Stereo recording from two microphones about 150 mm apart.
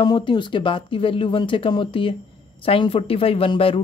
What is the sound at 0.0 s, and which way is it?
A woman's voice, 30° left (ahead or behind).